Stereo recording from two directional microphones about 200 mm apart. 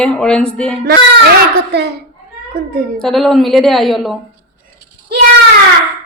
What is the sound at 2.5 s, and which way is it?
Speech, 45° right (ahead or behind).